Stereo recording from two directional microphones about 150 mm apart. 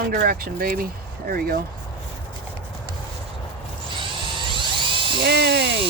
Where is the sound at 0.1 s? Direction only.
80° right.